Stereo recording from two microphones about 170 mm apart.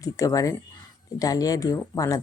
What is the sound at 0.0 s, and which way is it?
A woman's voice, 20° left (ahead or behind).